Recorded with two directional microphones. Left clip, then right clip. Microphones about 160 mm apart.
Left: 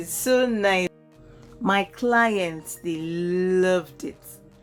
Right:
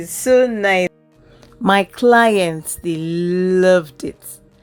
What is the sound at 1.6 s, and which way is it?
Speech, 50° right (ahead or behind).